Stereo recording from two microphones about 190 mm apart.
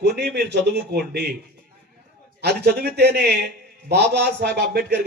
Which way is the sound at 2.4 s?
60° right (ahead or behind).